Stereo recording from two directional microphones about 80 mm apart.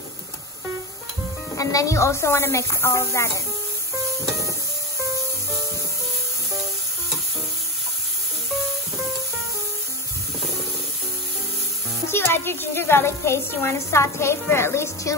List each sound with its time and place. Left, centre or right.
1.6 s a woman's voice: left
12.1 s a woman's voice: left